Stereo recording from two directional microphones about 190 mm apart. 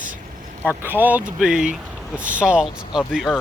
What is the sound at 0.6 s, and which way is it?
Speech, 10° right (ahead or behind).